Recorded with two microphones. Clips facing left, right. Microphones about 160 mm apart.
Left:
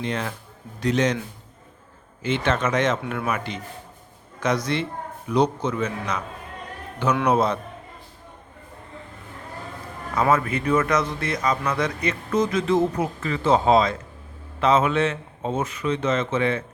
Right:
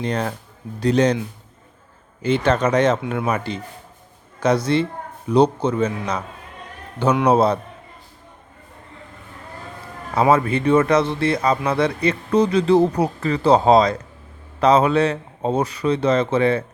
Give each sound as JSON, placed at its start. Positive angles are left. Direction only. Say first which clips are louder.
{"t": 0.0, "sound": "speech", "louder": "right 4 dB", "side_deg": -40}
{"t": 2.2, "sound": "speech", "louder": "right 5 dB", "side_deg": -40}
{"t": 7.3, "sound": "speech", "louder": "right 5 dB", "side_deg": -30}
{"t": 10.2, "sound": "speech", "louder": "right 4 dB", "side_deg": -30}